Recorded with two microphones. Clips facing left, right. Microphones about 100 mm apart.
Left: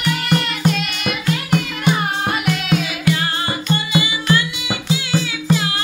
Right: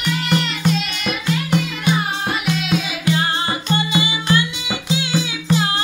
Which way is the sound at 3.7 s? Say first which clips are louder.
Left 1 dB; 25° right (ahead or behind).